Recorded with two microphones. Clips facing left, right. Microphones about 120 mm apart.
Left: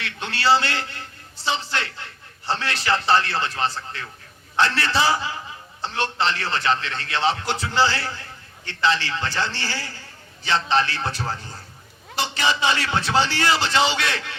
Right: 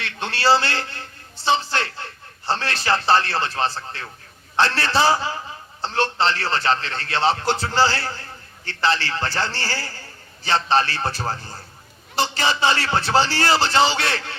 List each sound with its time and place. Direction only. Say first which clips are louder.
0.0 s a man's voice: right 2 dB; 30° right (ahead or behind)